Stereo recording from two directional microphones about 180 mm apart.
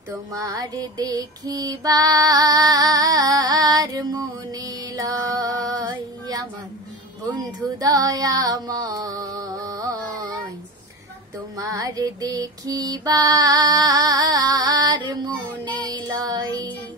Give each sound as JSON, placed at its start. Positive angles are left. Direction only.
{"t": 0.1, "sound": "music", "side_deg": -20}
{"t": 7.8, "sound": "music", "side_deg": -20}
{"t": 11.5, "sound": "music", "side_deg": -20}
{"t": 15.7, "sound": "child singing", "side_deg": 10}
{"t": 16.2, "sound": "music", "side_deg": -20}